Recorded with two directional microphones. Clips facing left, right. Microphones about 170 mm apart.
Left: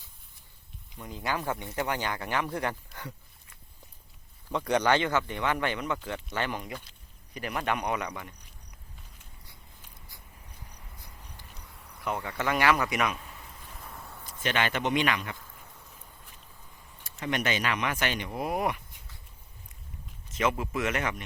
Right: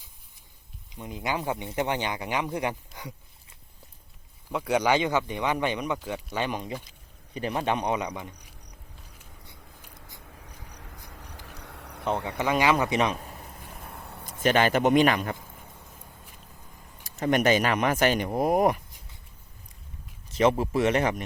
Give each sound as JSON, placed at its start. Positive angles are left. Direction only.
{"t": 0.9, "sound": "speech", "side_deg": -20}
{"t": 4.4, "sound": "speech", "side_deg": -10}
{"t": 10.8, "sound": "vehicle", "side_deg": -90}
{"t": 11.2, "sound": "a sound", "side_deg": -80}
{"t": 12.0, "sound": "speech", "side_deg": -25}
{"t": 12.4, "sound": "speech", "side_deg": -15}
{"t": 13.1, "sound": "a sound", "side_deg": -40}
{"t": 14.0, "sound": "a sound", "side_deg": -65}
{"t": 14.3, "sound": "speech", "side_deg": -40}
{"t": 17.0, "sound": "speech", "side_deg": -40}
{"t": 20.3, "sound": "speech", "side_deg": -35}